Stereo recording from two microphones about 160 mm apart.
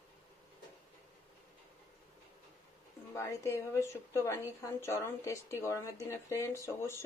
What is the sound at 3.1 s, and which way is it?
A woman's voice, 15° left (ahead or behind).